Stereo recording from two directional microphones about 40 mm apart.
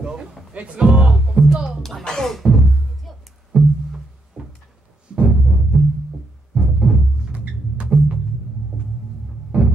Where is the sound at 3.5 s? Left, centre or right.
Right.